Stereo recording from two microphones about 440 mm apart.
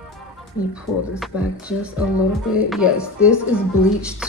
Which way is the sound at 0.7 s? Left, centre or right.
Centre.